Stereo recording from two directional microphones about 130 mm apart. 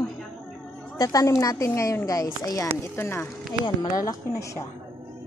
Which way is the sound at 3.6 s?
30° left (ahead or behind).